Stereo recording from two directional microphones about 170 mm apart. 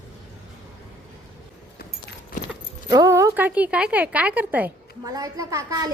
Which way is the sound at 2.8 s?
20° right (ahead or behind).